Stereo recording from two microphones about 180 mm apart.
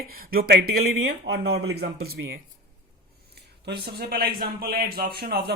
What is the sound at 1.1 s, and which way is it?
Speech, 65° right (ahead or behind).